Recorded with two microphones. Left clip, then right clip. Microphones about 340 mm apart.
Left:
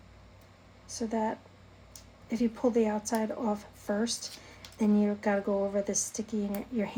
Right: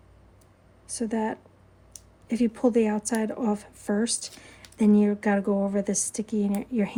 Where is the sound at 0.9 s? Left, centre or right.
Right.